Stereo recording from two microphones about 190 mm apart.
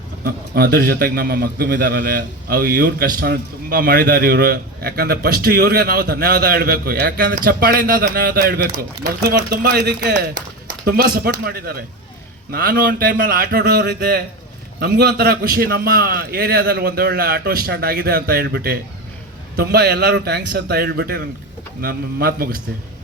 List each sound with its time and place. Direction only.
0.3 s a man's voice: 55° right (ahead or behind)